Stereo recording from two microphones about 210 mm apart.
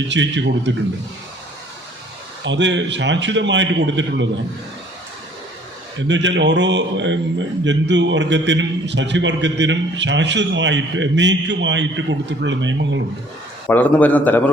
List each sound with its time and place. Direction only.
0.1 s a man's voice: 60° right (ahead or behind)
2.4 s a man's voice: 60° right (ahead or behind)
6.0 s a man's voice: 60° right (ahead or behind)
13.7 s a man's voice: 10° left (ahead or behind)